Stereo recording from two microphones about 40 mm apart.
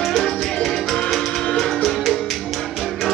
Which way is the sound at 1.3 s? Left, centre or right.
Centre.